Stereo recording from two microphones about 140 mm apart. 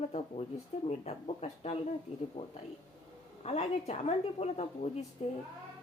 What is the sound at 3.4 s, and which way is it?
A woman's voice, 50° left (ahead or behind).